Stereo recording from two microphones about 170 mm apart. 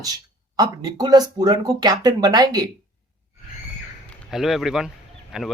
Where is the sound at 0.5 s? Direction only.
25° right (ahead or behind).